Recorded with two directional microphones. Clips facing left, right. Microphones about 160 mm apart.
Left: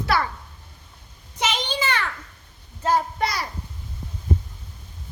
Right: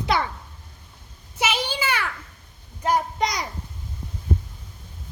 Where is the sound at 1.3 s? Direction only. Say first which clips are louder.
Even; 10° right (ahead or behind).